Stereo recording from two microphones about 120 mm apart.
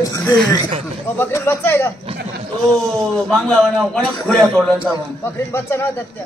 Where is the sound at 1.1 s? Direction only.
20° left (ahead or behind).